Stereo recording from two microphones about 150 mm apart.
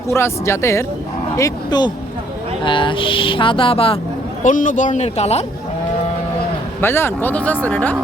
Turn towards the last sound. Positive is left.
turn(degrees=10)  # may be behind; listen again after turning